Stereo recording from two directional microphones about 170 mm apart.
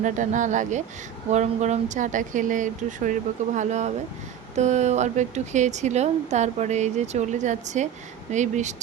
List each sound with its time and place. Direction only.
0.0 s speech: 45° right (ahead or behind)